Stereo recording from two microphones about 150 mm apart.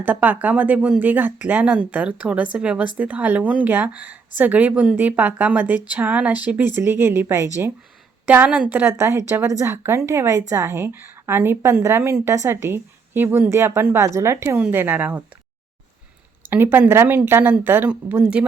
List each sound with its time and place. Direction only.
0.0 s a woman's voice: 10° right (ahead or behind)
16.4 s a sound: 15° right (ahead or behind)
16.7 s a woman's voice: 15° right (ahead or behind)